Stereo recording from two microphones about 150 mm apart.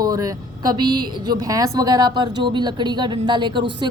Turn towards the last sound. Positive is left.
turn(degrees=-30)  # may be behind; listen again after turning